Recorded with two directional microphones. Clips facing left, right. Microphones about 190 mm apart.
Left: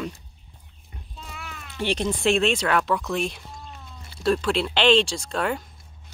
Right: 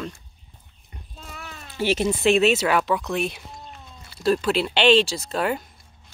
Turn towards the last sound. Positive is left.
turn(degrees=-5)  # may be behind; listen again after turning